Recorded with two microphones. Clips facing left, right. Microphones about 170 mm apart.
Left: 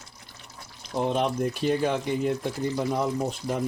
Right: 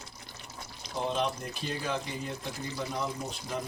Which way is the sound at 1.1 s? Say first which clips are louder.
Left 6 dB; 55° left (ahead or behind).